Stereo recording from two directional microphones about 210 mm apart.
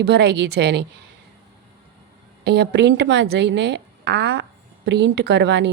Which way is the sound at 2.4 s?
50° right (ahead or behind).